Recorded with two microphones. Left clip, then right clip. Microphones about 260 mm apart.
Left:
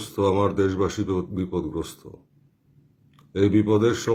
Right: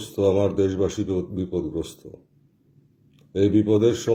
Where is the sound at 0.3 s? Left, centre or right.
Centre.